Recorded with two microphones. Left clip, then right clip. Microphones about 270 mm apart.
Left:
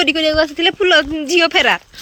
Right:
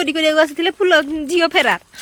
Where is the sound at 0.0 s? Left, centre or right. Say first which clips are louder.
Left 1 dB; centre.